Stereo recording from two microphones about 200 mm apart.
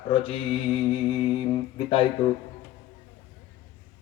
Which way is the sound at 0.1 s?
30° left (ahead or behind).